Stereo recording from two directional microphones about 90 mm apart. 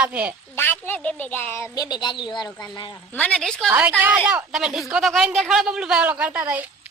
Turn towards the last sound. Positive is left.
turn(degrees=-20)  # may be behind; listen again after turning